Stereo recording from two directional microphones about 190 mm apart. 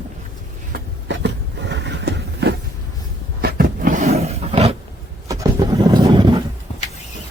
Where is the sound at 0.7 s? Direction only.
65° right (ahead or behind).